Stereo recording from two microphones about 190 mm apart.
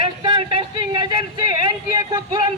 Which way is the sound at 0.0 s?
25° right (ahead or behind).